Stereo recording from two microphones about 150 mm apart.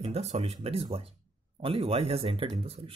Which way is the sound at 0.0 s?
45° right (ahead or behind).